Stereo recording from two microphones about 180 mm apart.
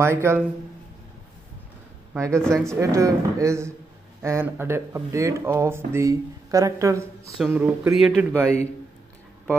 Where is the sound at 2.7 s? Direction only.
15° right (ahead or behind).